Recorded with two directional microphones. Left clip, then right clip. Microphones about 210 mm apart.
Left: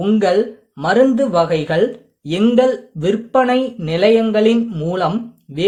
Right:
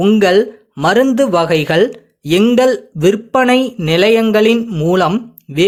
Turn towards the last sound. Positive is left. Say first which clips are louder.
# right 4 dB
turn(degrees=-25)  # may be behind; listen again after turning